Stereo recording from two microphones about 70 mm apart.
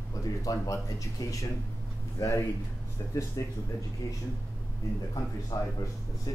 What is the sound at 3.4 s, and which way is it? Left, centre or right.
Speech, left.